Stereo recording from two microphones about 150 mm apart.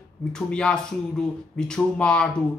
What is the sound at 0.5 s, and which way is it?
Speech, 5° left (ahead or behind).